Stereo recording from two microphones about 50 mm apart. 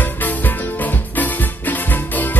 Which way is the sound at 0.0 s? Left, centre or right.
Left.